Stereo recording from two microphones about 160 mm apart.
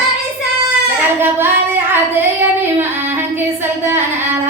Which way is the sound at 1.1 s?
15° right (ahead or behind).